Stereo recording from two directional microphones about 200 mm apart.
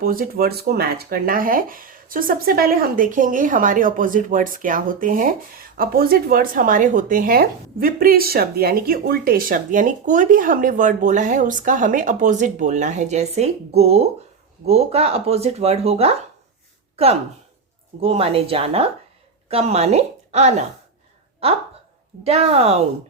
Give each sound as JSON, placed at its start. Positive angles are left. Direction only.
{"t": 0.0, "sound": "speech", "side_deg": -45}
{"t": 18.0, "sound": "a woman's voice", "side_deg": -30}
{"t": 22.2, "sound": "speech", "side_deg": -30}